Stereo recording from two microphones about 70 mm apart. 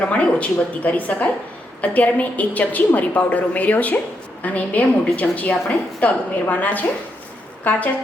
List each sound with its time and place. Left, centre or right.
0.1 s a woman's voice: centre